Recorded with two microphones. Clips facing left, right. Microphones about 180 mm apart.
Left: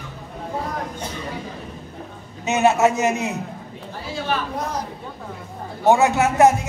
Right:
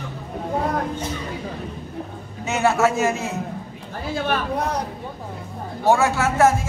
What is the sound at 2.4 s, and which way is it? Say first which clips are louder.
Speech: left 2 dB; 20° left (ahead or behind).